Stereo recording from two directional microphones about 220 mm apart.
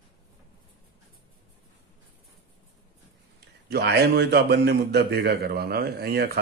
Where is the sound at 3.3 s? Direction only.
50° right (ahead or behind).